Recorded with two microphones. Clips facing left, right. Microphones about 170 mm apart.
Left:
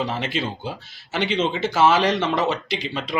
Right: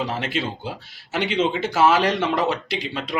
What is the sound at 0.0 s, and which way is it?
A man's voice, 5° right (ahead or behind).